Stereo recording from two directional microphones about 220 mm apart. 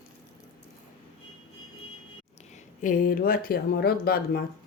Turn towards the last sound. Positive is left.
turn(degrees=45)  # may be behind; listen again after turning